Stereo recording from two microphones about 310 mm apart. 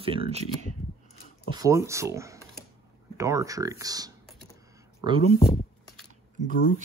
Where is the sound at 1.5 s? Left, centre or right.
Centre.